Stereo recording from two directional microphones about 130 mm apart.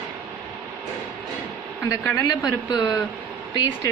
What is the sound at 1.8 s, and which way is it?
Speech, 20° left (ahead or behind).